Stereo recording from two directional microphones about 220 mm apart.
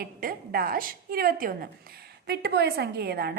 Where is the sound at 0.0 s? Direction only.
40° right (ahead or behind).